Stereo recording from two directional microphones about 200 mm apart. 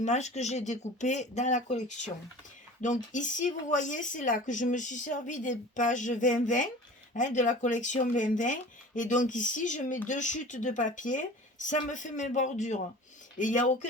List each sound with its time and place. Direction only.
0.0 s speech: 35° left (ahead or behind)